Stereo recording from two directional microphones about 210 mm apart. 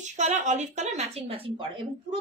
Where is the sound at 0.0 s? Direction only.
35° right (ahead or behind).